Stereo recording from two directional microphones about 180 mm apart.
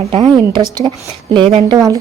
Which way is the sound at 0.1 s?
30° right (ahead or behind).